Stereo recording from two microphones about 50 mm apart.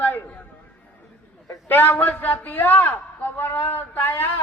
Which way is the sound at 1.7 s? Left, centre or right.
Left.